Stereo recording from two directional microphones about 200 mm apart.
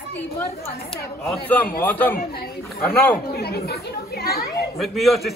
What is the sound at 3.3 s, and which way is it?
Speech, 55° left (ahead or behind).